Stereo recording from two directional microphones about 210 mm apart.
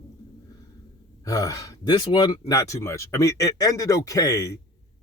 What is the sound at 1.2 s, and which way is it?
Speech, 15° left (ahead or behind).